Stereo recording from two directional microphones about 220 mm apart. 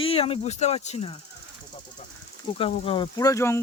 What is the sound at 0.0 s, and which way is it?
Speech, 25° left (ahead or behind).